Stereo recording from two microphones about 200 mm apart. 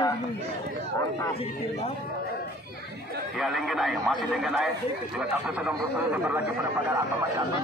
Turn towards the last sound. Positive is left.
turn(degrees=-5)  # may be behind; listen again after turning